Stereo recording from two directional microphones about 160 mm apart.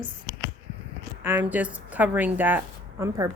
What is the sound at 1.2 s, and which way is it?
A woman's voice, 10° right (ahead or behind).